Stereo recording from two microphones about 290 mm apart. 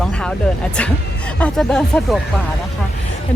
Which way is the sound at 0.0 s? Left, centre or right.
Centre.